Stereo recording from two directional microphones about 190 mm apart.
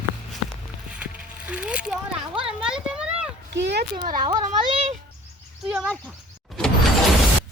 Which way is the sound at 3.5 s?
65° right (ahead or behind).